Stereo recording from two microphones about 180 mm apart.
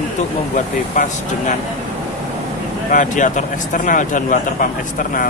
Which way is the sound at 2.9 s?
45° left (ahead or behind).